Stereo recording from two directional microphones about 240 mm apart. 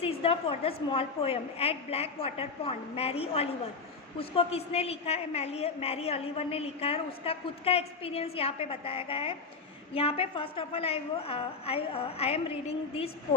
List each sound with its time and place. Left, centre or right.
0.0 s a woman's voice: left